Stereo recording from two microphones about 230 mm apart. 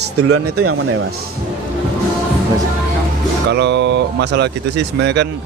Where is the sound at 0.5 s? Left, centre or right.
Right.